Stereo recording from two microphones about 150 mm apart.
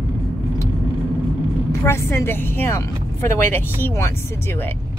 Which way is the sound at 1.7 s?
15° left (ahead or behind).